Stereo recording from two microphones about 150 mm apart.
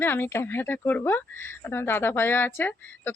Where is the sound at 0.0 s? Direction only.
15° left (ahead or behind).